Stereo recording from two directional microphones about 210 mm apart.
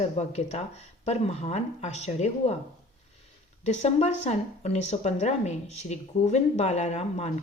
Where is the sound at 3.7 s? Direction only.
30° left (ahead or behind).